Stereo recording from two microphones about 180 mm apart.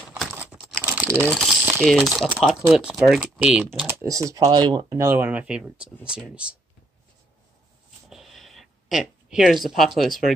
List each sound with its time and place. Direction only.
0.1 s crumpling: centre (ahead or behind)
0.8 s typing: 10° right (ahead or behind)
1.3 s speech: centre (ahead or behind)
3.7 s speech: 15° right (ahead or behind)
8.1 s a sound: centre (ahead or behind)
9.7 s speech: centre (ahead or behind)